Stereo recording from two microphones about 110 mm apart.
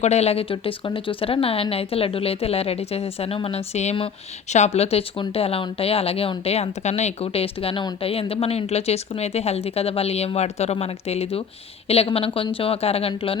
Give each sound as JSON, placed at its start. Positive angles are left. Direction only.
{"t": 0.0, "sound": "speech", "side_deg": 80}
{"t": 0.5, "sound": "speech", "side_deg": 50}